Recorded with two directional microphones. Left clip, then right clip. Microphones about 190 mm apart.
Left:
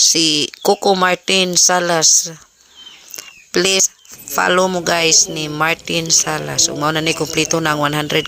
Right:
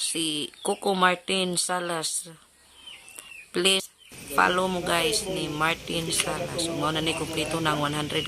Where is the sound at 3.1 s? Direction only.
30° left (ahead or behind).